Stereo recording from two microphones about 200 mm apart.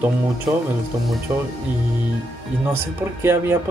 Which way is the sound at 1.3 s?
15° right (ahead or behind).